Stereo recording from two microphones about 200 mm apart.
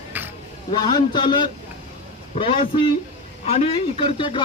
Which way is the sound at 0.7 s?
20° left (ahead or behind).